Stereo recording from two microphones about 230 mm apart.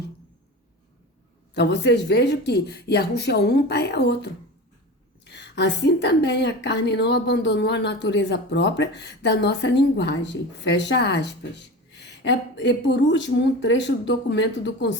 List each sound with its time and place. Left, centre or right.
1.5 s a woman's voice: left